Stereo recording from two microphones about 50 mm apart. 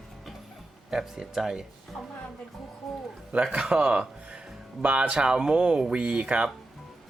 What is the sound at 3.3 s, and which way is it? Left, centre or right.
Speech, right.